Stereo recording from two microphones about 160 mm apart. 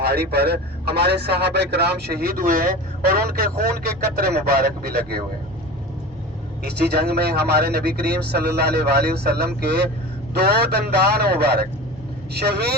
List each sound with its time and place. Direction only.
0.0 s a man's voice: 80° right
6.6 s a man's voice: 80° right